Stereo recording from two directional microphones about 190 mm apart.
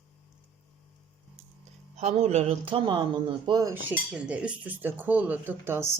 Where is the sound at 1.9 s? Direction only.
35° right (ahead or behind).